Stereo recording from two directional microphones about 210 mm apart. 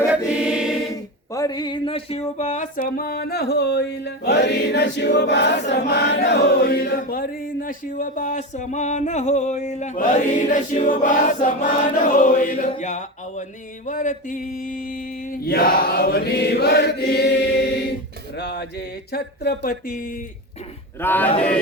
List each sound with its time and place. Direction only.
0.1 s choir: 5° right (ahead or behind)
1.3 s a sound: 15° left (ahead or behind)
2.4 s mantra: 35° left (ahead or behind); by 5.8 s 55° left (ahead or behind)
5.9 s chant: 55° left (ahead or behind); by 13.4 s 35° left (ahead or behind)
13.8 s mantra: 35° left (ahead or behind)
21.0 s speech: 10° left (ahead or behind)